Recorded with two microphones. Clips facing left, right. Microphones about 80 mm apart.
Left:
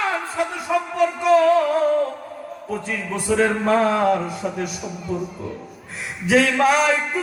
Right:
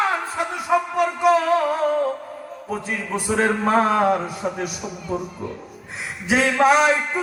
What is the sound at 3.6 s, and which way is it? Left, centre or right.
Music, right.